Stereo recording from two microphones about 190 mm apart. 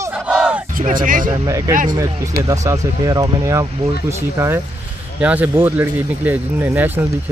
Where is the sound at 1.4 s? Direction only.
15° right (ahead or behind).